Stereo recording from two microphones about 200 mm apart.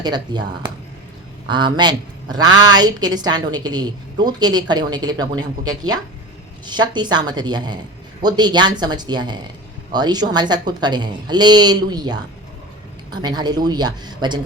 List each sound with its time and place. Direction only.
0.0 s a woman's voice: 20° right (ahead or behind)